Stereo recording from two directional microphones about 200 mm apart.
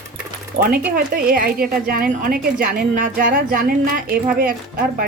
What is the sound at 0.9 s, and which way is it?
A woman's voice, 45° right (ahead or behind).